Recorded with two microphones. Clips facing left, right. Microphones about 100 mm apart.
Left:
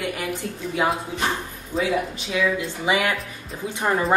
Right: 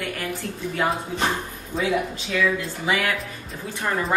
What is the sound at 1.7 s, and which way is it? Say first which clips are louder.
Speech: left 1 dB; centre (ahead or behind).